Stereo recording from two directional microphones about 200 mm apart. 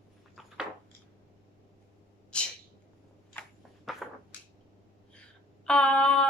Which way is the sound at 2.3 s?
5° left (ahead or behind).